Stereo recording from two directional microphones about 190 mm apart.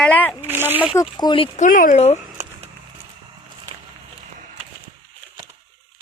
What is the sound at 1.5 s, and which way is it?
Speech, 45° left (ahead or behind).